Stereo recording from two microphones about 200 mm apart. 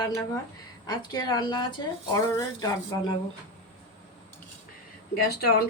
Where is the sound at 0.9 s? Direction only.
20° left (ahead or behind).